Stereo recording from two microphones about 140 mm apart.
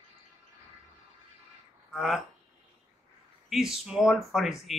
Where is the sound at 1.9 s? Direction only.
Centre (ahead or behind).